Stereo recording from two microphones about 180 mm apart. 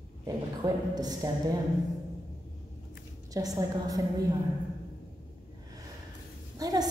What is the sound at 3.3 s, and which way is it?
Speech, 20° right (ahead or behind).